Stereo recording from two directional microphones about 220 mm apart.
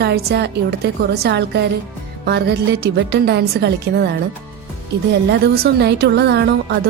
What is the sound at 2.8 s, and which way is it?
Speech, 45° right (ahead or behind).